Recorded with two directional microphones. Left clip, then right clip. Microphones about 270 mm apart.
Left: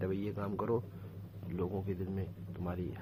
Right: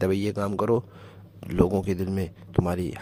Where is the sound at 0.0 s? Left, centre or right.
Right.